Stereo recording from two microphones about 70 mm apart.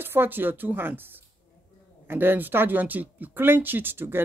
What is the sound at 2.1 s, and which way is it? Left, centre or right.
Speech, right.